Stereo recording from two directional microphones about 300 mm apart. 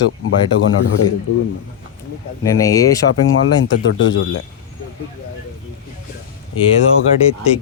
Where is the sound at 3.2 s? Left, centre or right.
Left.